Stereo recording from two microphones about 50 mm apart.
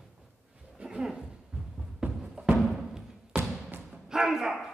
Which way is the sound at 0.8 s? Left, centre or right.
Centre.